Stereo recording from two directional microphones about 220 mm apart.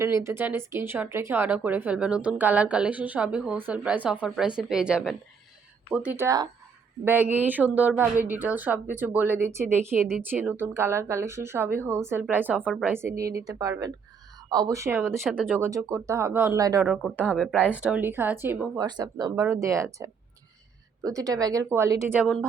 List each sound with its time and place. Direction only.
0.0 s speech: 10° right (ahead or behind)
16.8 s a woman's voice: centre (ahead or behind)